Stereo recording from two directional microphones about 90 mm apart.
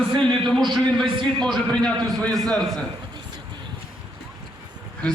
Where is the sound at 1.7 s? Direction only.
10° left (ahead or behind).